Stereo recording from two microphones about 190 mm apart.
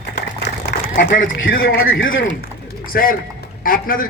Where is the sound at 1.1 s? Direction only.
45° left (ahead or behind).